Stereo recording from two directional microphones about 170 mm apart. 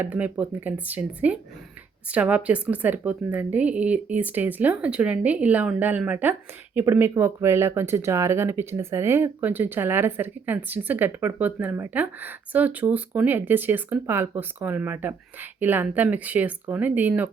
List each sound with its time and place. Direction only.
0.0 s speech: 10° right (ahead or behind)